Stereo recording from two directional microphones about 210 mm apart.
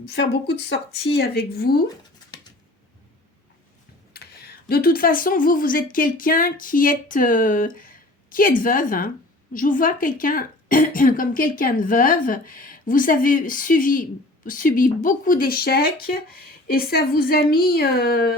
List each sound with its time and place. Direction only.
0.0 s speech: 50° left (ahead or behind)
4.1 s a sound: 50° left (ahead or behind)
4.7 s a woman's voice: 45° left (ahead or behind)